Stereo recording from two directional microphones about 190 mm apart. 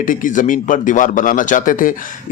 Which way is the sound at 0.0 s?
45° left (ahead or behind).